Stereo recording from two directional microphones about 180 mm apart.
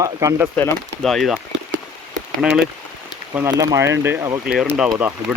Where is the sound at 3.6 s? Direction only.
15° right (ahead or behind).